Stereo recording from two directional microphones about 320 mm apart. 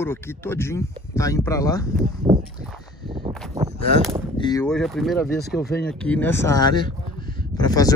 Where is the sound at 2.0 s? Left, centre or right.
Centre.